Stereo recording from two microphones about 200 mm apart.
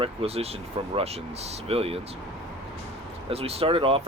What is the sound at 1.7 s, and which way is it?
Speech, 30° right (ahead or behind).